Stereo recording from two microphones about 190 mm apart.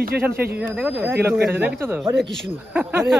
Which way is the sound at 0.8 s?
10° right (ahead or behind).